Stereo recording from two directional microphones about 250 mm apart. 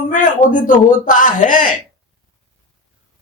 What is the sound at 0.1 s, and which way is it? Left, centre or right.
Speech, left.